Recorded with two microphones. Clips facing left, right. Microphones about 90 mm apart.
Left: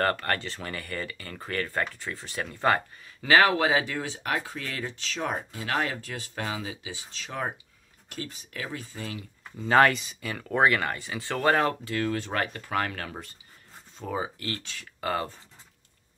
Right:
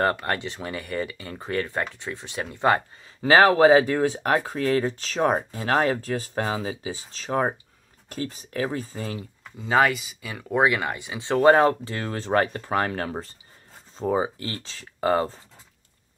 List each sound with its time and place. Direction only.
0.0 s speech: 15° right (ahead or behind)
3.2 s speech: 35° right (ahead or behind)
9.6 s speech: 5° right (ahead or behind); by 15.3 s 30° right (ahead or behind)